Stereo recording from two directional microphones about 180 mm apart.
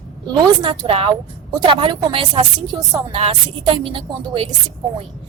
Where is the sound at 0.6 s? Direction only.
30° right (ahead or behind).